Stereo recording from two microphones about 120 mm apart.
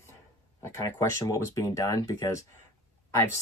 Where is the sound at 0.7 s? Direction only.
25° left (ahead or behind).